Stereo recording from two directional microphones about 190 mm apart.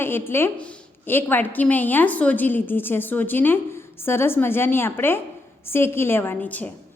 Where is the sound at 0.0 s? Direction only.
10° left (ahead or behind).